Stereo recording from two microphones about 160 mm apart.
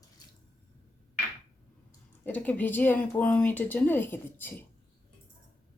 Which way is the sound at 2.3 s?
10° left (ahead or behind).